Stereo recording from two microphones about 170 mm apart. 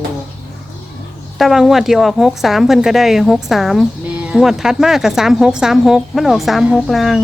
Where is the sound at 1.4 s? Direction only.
Centre (ahead or behind).